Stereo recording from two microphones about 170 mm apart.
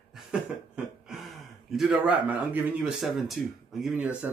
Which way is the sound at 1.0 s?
Centre (ahead or behind).